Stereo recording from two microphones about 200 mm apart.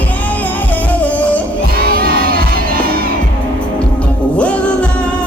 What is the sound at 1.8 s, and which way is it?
Crowd, 50° right (ahead or behind).